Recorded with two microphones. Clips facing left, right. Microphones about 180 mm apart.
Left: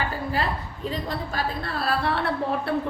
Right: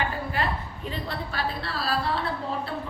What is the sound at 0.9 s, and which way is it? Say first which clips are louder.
A woman's voice: left 4 dB; 40° left (ahead or behind).